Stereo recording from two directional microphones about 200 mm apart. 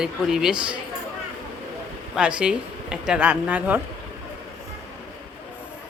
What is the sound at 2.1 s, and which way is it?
Speech, 5° right (ahead or behind).